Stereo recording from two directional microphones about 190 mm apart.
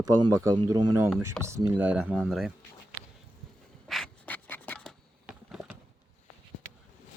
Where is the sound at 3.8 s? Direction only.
Centre (ahead or behind).